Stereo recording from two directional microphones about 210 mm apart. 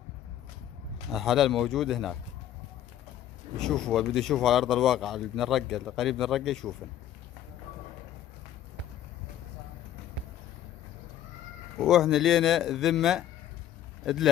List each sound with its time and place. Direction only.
1.1 s speech: centre (ahead or behind)
3.5 s speech: 5° left (ahead or behind)
11.8 s speech: centre (ahead or behind)